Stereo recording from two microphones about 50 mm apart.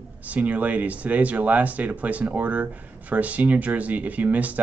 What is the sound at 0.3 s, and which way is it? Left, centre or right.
Speech, right.